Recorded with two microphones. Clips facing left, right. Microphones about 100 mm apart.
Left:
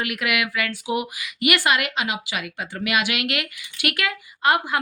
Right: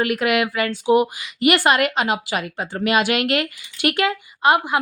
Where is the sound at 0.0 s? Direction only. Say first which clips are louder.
Right 6 dB; 35° right (ahead or behind).